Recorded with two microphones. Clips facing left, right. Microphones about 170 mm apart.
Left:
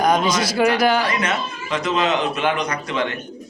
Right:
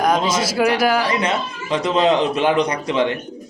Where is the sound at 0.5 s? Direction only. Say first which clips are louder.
Even; 5° right (ahead or behind).